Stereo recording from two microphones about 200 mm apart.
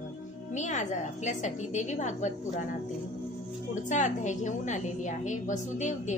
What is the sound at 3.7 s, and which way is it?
A woman's voice, 40° left (ahead or behind).